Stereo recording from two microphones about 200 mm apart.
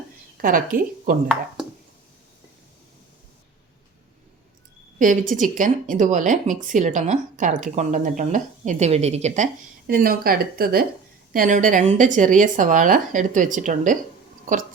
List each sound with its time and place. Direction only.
0.4 s speech: 45° right (ahead or behind)
4.9 s speech: 40° right (ahead or behind)
9.8 s speech: 50° right (ahead or behind)